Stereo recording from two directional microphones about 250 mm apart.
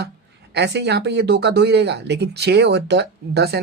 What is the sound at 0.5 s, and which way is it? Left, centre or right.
Speech, right.